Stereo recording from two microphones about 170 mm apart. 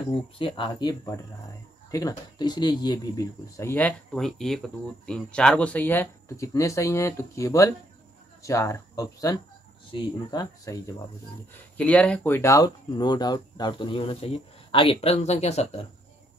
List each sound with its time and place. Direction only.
0.4 s speech: 30° left (ahead or behind)
11.5 s speech: 10° left (ahead or behind); by 15.9 s 40° left (ahead or behind)